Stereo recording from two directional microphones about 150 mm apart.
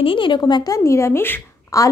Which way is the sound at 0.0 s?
35° left (ahead or behind).